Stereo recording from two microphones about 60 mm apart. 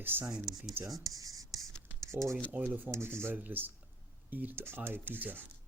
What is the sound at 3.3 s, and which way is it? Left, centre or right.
Speech, right.